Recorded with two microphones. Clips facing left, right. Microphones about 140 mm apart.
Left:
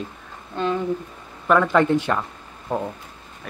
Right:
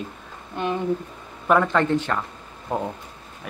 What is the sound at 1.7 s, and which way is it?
Speech, 10° left (ahead or behind).